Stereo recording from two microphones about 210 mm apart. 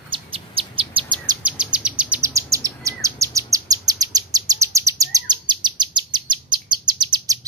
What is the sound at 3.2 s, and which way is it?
Chirp, 15° right (ahead or behind).